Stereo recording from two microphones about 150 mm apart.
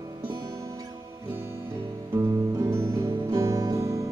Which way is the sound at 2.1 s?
20° right (ahead or behind).